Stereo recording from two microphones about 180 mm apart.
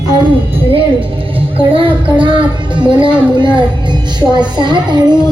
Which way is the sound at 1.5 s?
30° right (ahead or behind).